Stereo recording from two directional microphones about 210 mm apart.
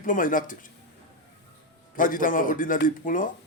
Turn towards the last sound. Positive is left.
turn(degrees=40)  # may be behind; listen again after turning